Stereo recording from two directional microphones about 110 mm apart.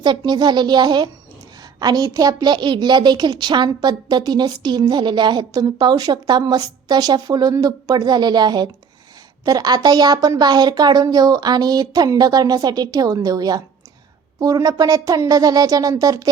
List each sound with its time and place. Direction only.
0.0 s a woman's voice: 40° right (ahead or behind)